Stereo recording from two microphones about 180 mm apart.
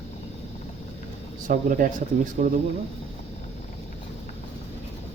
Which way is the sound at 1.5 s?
50° right (ahead or behind).